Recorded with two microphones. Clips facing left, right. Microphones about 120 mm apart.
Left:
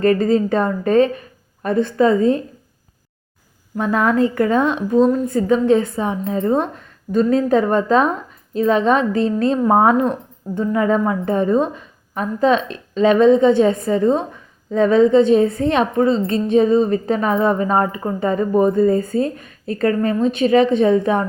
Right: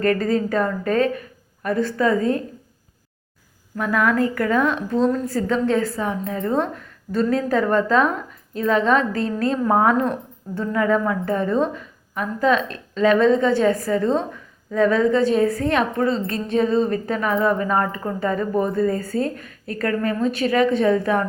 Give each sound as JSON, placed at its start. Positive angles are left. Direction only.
{"t": 0.0, "sound": "a woman's voice", "side_deg": 20}
{"t": 3.8, "sound": "a woman's voice", "side_deg": 25}